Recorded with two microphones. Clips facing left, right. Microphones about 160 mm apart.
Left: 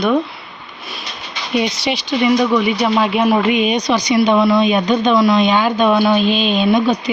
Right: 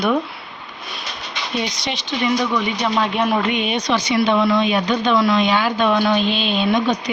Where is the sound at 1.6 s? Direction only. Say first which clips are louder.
Left 6 dB; 10° left (ahead or behind).